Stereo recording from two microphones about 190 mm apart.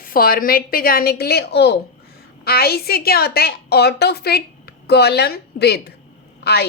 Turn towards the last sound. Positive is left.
turn(degrees=60)  # may be behind; listen again after turning